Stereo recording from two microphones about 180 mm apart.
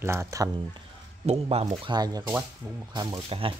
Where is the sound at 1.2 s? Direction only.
35° right (ahead or behind).